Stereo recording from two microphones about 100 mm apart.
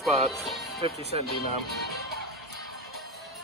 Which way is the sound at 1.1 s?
60° right (ahead or behind).